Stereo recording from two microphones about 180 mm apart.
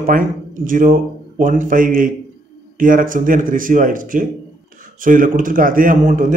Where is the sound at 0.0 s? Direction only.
50° right (ahead or behind).